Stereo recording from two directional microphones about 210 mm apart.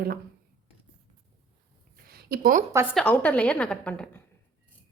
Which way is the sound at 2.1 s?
45° right (ahead or behind).